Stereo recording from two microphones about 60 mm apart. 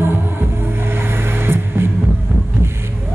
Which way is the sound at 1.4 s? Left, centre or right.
Right.